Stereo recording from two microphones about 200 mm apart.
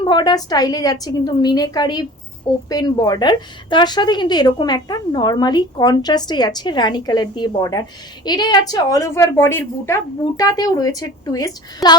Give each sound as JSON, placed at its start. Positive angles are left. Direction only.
{"t": 0.0, "sound": "a woman's voice", "side_deg": 20}